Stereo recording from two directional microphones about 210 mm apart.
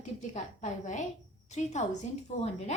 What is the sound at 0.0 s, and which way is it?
A woman's voice, 35° left (ahead or behind).